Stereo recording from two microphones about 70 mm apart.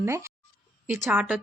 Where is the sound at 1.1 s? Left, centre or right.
Right.